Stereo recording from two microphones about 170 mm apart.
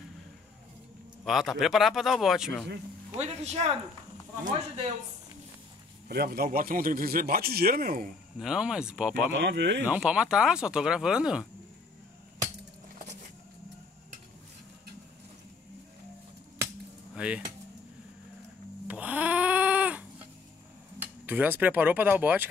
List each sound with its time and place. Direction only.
1.2 s speech: centre (ahead or behind)
3.2 s speech: 40° right (ahead or behind)
6.0 s a man's voice: 65° right (ahead or behind)
8.4 s speech: 5° right (ahead or behind)
9.3 s speech: 90° right
9.8 s speech: 5° right (ahead or behind)
17.1 s keys jangling: 5° right (ahead or behind)
18.9 s cat: 10° right (ahead or behind)
21.0 s speech: 10° right (ahead or behind)